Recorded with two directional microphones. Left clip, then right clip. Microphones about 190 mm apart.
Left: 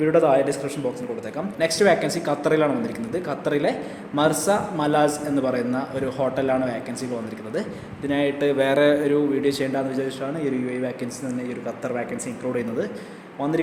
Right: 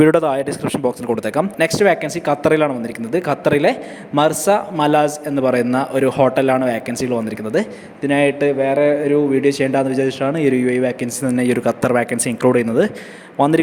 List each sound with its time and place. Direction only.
0.0 s speech: 50° right (ahead or behind); by 8.5 s 25° right (ahead or behind)
8.5 s mantra: 15° right (ahead or behind)
9.3 s speech: 25° right (ahead or behind)
11.3 s speech: 40° right (ahead or behind)